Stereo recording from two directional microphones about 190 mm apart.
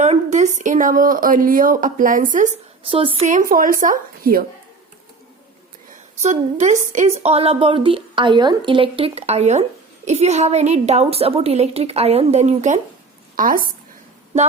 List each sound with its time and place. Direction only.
0.0 s a woman's voice: 40° right (ahead or behind)
2.9 s a woman's voice: 30° right (ahead or behind)
3.2 s a woman's voice: 45° right (ahead or behind)
6.2 s a woman's voice: 40° right (ahead or behind)